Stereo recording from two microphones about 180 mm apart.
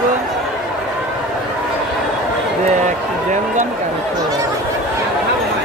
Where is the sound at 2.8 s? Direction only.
45° right (ahead or behind).